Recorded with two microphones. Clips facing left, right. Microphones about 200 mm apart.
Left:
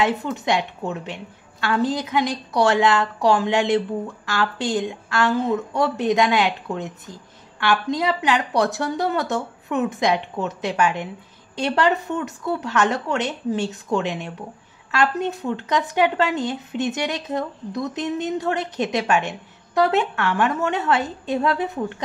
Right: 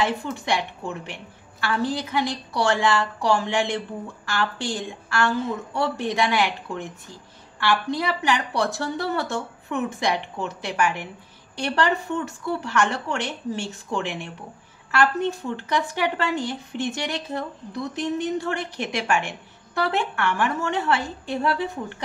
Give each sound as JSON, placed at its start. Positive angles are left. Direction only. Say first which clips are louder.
{"t": 0.0, "sound": "a woman's voice", "louder": "left 3 dB", "side_deg": 20}
{"t": 7.9, "sound": "a woman's voice", "louder": "left 3 dB", "side_deg": 20}